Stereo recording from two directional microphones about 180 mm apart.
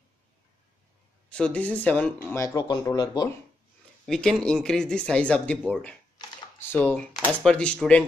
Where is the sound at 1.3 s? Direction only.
5° left (ahead or behind).